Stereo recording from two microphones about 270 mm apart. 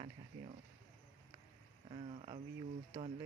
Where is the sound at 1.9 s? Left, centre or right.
Right.